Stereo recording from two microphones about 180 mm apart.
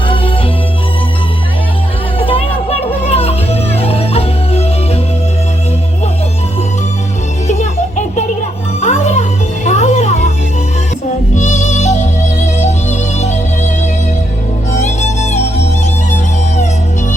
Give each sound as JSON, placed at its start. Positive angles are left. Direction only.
{"t": 2.1, "sound": "music", "side_deg": 30}
{"t": 7.4, "sound": "music", "side_deg": 40}
{"t": 11.3, "sound": "music", "side_deg": 40}
{"t": 14.7, "sound": "music", "side_deg": 40}